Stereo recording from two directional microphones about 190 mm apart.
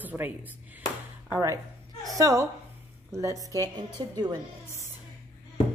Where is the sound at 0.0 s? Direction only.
10° right (ahead or behind).